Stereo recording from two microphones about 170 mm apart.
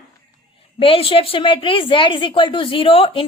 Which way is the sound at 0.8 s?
30° left (ahead or behind).